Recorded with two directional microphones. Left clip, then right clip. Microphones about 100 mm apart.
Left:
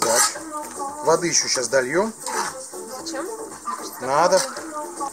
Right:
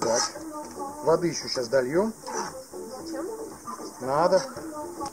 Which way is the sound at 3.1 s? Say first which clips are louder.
Left 3 dB; 45° left (ahead or behind).